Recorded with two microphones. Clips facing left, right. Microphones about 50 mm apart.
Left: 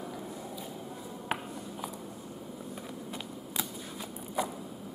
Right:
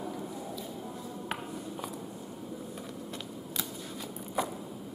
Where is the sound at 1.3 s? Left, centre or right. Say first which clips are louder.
Left 4 dB; centre.